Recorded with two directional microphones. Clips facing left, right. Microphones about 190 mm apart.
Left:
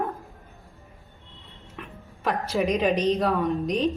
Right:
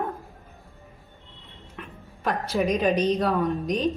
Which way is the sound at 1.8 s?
Centre (ahead or behind).